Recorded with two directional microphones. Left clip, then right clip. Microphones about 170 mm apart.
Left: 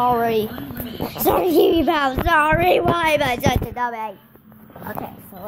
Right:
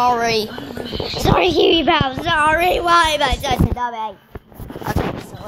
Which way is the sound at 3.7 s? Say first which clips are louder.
Right 1 dB; 15° right (ahead or behind).